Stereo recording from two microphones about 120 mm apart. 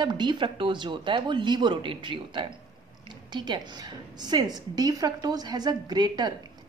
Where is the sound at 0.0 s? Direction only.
40° right (ahead or behind).